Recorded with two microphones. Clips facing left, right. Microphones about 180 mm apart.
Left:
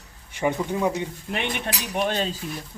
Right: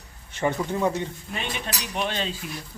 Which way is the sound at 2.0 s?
40° left (ahead or behind).